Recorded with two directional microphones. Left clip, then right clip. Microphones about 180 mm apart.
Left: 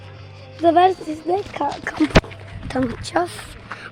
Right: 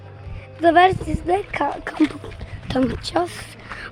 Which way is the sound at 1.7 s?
10° right (ahead or behind).